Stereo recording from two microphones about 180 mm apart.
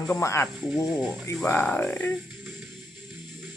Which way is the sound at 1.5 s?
10° left (ahead or behind).